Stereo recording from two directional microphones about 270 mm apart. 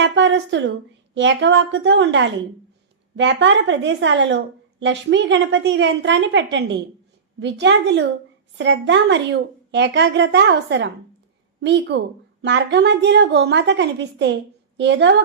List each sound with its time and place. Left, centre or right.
0.0 s a woman's voice: right